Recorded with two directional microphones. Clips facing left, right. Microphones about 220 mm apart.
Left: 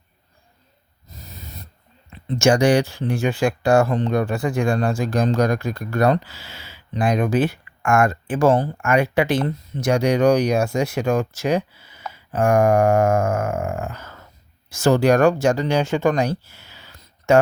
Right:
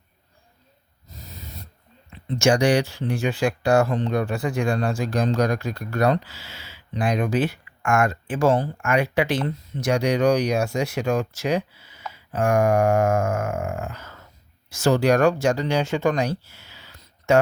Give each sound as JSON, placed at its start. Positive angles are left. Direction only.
{"t": 2.4, "sound": "speech", "side_deg": 50}